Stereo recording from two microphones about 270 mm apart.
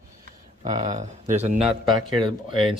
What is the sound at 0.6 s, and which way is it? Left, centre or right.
Speech, right.